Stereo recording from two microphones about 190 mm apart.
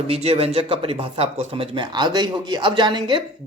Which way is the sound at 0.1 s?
30° right (ahead or behind).